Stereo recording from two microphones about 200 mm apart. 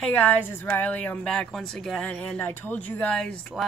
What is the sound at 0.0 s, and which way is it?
A woman's voice, 10° left (ahead or behind).